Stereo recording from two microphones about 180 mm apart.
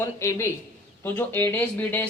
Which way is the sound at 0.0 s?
15° left (ahead or behind).